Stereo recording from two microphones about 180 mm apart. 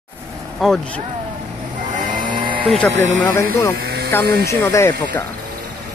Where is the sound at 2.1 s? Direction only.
25° right (ahead or behind).